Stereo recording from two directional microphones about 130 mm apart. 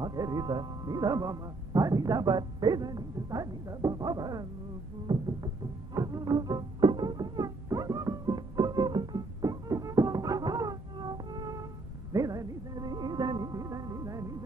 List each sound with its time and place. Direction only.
0.0 s a man's voice: 30° right (ahead or behind)
5.0 s music: 35° right (ahead or behind)